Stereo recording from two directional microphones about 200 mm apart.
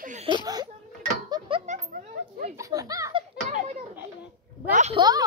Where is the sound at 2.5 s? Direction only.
15° right (ahead or behind).